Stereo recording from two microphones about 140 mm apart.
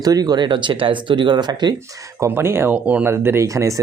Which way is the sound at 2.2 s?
20° right (ahead or behind).